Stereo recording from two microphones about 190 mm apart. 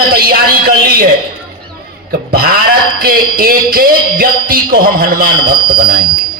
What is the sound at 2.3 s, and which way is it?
A man's voice, 55° right (ahead or behind).